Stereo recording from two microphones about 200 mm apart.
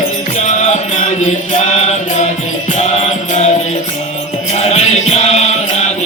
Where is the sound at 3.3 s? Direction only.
35° left (ahead or behind).